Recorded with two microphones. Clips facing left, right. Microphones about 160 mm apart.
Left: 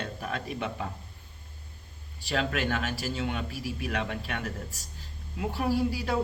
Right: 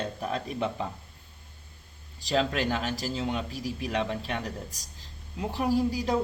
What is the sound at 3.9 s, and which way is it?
Speech, 25° right (ahead or behind).